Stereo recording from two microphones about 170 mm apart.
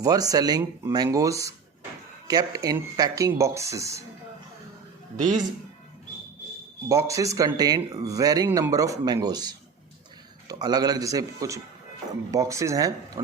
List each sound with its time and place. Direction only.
0.0 s speech: 20° right (ahead or behind)
6.8 s speech: 20° right (ahead or behind)